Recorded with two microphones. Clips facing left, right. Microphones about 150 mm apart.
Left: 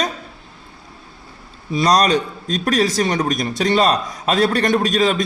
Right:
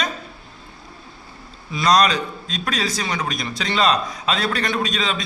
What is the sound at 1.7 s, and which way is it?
A man's voice, 40° left (ahead or behind).